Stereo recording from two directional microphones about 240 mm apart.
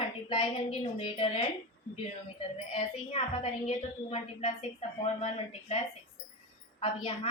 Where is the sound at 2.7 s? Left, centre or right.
Left.